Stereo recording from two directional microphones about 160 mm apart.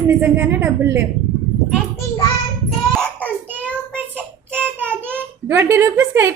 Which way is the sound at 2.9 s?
5° left (ahead or behind).